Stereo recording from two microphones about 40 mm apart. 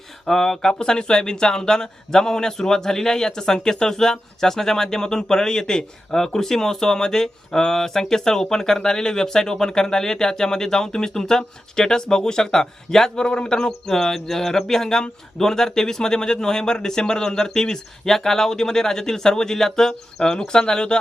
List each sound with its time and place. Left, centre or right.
0.3 s speech: centre